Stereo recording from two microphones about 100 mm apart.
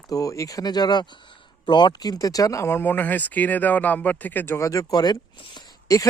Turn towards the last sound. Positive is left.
turn(degrees=35)  # may be behind; listen again after turning